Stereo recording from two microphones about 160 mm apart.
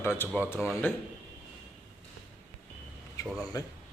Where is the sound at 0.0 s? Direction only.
15° left (ahead or behind).